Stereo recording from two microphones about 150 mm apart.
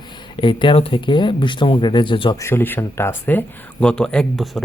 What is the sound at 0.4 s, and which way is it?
Speech, 35° left (ahead or behind).